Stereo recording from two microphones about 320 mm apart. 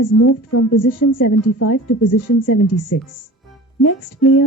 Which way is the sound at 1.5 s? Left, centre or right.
Left.